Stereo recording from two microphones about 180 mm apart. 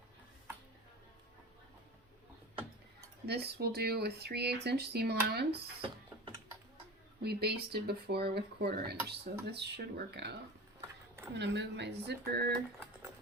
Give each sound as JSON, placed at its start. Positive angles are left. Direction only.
{"t": 3.2, "sound": "speech", "side_deg": -65}
{"t": 5.5, "sound": "a sound", "side_deg": -30}
{"t": 7.2, "sound": "speech", "side_deg": -60}
{"t": 11.3, "sound": "speech", "side_deg": -75}